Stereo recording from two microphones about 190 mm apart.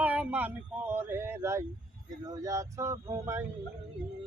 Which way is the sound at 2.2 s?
20° right (ahead or behind).